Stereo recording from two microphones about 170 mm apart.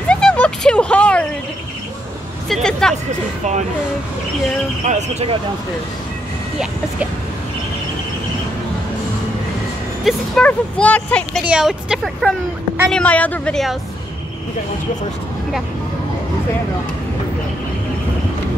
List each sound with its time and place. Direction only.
0.1 s a sound: 5° left (ahead or behind)
2.5 s a woman's voice: 5° left (ahead or behind)
4.8 s speech: 40° right (ahead or behind)
10.0 s speech: 5° left (ahead or behind)
11.4 s a woman's voice: 5° right (ahead or behind)